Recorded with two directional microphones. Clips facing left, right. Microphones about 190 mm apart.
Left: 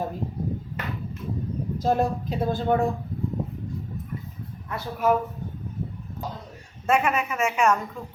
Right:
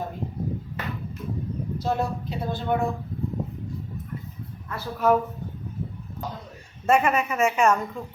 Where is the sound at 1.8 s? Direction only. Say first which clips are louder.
Left 4 dB; 45° left (ahead or behind).